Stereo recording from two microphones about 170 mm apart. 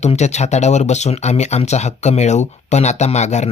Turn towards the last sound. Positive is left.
turn(degrees=40)  # may be behind; listen again after turning